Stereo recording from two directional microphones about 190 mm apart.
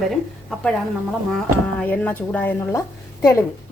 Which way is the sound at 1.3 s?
5° left (ahead or behind).